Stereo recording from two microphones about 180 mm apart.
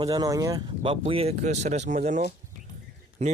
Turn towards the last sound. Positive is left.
turn(degrees=-40)  # may be behind; listen again after turning